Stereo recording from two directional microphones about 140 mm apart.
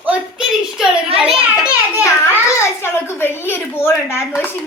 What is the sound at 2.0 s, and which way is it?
A child's voice, 20° left (ahead or behind).